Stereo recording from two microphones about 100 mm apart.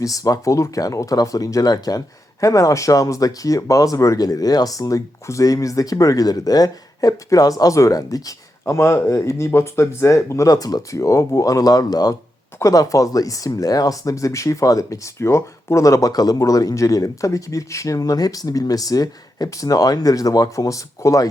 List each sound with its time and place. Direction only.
0.0 s speech: 35° left (ahead or behind)